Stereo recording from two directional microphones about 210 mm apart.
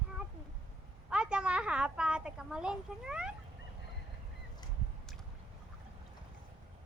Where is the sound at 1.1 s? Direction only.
5° right (ahead or behind).